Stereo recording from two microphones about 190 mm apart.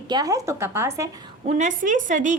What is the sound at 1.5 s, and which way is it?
Speech, 40° right (ahead or behind).